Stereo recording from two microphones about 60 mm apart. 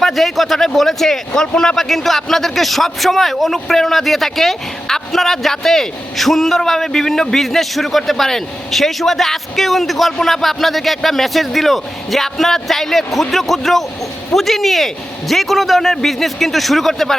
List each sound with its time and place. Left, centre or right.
0.0 s a man's voice: centre